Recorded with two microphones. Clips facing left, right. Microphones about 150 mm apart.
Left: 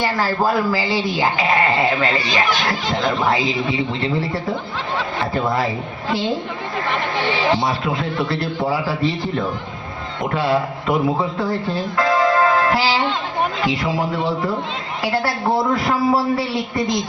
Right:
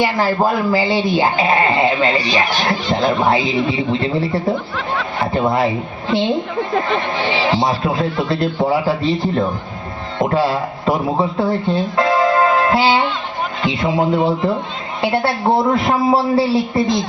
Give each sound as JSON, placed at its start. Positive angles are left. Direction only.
{"t": 0.0, "sound": "a man's voice", "side_deg": -15}